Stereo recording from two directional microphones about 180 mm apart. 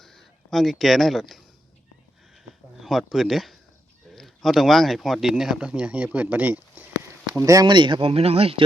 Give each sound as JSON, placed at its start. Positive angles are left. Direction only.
{"t": 0.0, "sound": "speech", "side_deg": 0}
{"t": 2.8, "sound": "speech", "side_deg": 0}